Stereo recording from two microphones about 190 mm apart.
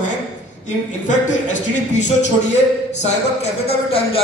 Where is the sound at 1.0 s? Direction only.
40° left (ahead or behind).